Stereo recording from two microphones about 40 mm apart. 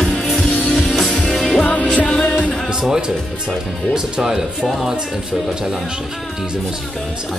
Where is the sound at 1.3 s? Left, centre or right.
Centre.